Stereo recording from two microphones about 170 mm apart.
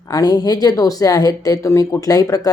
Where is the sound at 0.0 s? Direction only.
20° left (ahead or behind).